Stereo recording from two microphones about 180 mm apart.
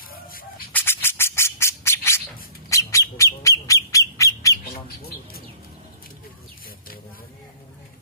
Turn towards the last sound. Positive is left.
turn(degrees=55)  # may be behind; listen again after turning